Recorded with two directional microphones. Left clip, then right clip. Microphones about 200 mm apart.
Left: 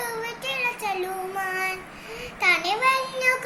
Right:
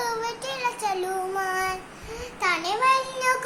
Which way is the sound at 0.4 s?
20° right (ahead or behind).